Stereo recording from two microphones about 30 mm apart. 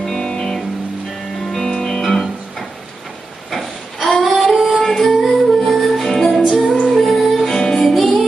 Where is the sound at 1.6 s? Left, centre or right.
Left.